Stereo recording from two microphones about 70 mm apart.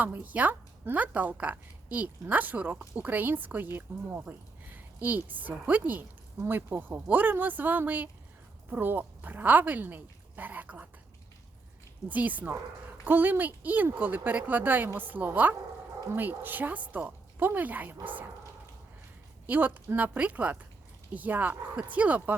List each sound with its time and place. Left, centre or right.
0.0 s speech: right
4.3 s a sound: right
5.0 s speech: right
12.0 s speech: right
19.5 s speech: right